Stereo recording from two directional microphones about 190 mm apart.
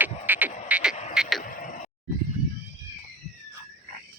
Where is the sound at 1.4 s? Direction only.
45° left (ahead or behind).